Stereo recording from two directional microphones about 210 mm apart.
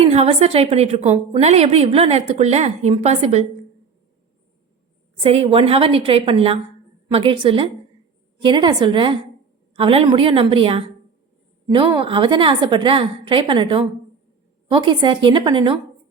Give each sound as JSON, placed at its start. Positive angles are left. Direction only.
{"t": 0.0, "sound": "a woman's voice", "side_deg": -30}
{"t": 5.2, "sound": "a woman's voice", "side_deg": -30}